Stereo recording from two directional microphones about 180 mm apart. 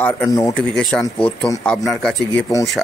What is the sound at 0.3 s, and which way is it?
Speech, 20° left (ahead or behind).